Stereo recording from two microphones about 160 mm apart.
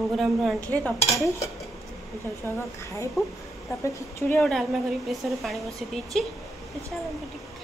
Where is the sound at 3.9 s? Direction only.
20° left (ahead or behind).